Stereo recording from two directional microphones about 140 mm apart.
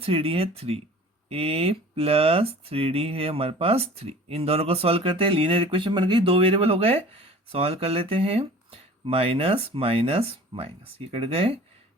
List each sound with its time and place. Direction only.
0.0 s speech: 40° right (ahead or behind)